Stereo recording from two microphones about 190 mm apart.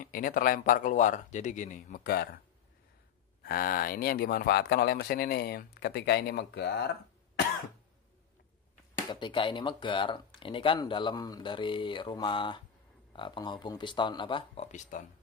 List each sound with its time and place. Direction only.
0.0 s speech: 50° left (ahead or behind)
3.4 s speech: 50° left (ahead or behind)
8.9 s speech: 25° left (ahead or behind); by 15.0 s 40° left (ahead or behind)